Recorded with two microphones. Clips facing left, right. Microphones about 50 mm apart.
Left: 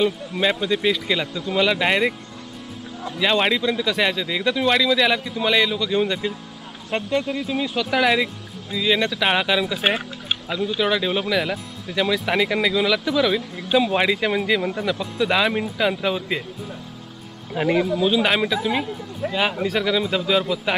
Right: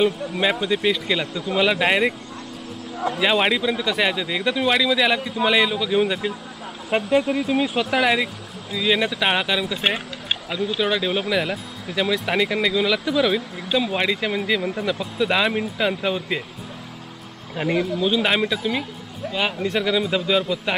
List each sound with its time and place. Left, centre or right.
0.3 s speech: centre
3.2 s speech: centre
13.7 s speech: centre
17.6 s speech: centre
19.2 s speech: left
19.6 s speech: centre